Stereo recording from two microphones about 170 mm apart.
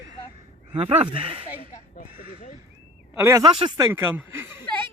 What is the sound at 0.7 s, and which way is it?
Speech, 35° right (ahead or behind).